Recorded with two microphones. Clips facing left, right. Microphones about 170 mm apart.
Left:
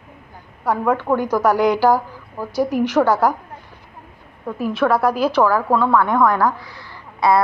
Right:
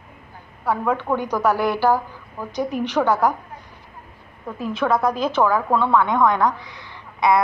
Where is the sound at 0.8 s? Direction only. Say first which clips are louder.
Left 5 dB; 10° left (ahead or behind).